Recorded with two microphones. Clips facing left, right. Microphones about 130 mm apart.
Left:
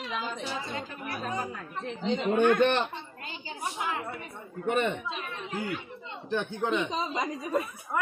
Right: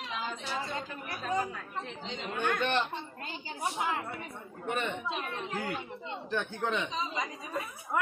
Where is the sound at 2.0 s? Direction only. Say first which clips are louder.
Left 11 dB; 55° left (ahead or behind).